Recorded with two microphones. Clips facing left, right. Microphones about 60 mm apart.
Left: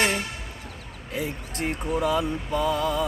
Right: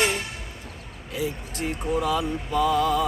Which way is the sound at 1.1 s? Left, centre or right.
Left.